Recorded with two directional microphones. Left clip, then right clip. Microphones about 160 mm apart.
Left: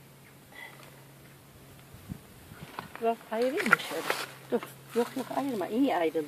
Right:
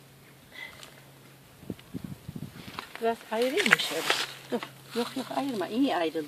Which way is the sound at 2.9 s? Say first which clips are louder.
Right 1 dB; 35° right (ahead or behind).